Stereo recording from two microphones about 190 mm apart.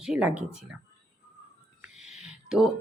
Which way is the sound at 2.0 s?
35° left (ahead or behind).